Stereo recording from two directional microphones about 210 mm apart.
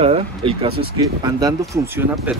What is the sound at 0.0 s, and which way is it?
Speech, 25° right (ahead or behind).